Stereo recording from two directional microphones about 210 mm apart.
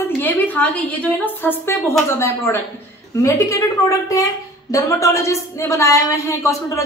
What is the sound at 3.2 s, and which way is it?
A woman's voice, 15° left (ahead or behind).